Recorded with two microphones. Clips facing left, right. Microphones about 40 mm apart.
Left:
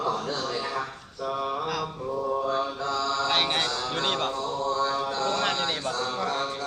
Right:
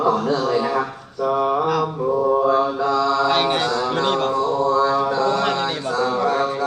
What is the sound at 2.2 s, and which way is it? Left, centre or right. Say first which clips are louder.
Mantra: right 9 dB; right.